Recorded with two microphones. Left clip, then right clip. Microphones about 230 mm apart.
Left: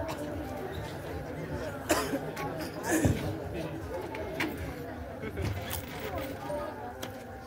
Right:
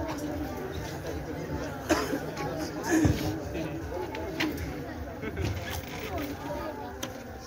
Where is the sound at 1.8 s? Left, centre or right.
Left.